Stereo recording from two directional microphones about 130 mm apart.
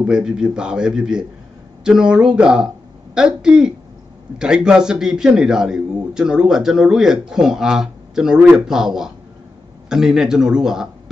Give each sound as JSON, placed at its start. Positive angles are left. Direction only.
{"t": 0.0, "sound": "a man's voice", "side_deg": -5}